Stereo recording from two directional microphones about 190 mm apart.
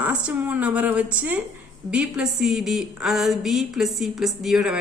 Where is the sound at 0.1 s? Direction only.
5° right (ahead or behind).